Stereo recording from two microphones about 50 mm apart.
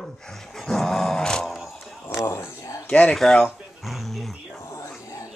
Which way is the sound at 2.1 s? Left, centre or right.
Left.